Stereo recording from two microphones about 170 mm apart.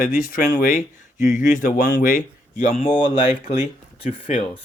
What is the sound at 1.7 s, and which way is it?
Speech, 80° left.